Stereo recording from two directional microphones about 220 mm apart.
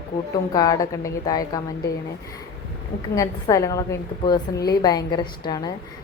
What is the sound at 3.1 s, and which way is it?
A woman's voice, 15° left (ahead or behind).